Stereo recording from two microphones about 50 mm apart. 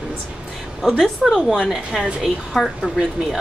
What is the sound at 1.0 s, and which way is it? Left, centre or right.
A woman's voice, centre.